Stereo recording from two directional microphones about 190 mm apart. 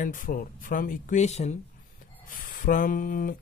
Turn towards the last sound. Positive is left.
turn(degrees=50)  # may be behind; listen again after turning